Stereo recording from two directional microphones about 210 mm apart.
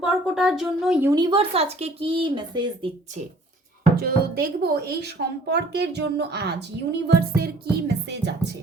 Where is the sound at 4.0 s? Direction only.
45° right (ahead or behind).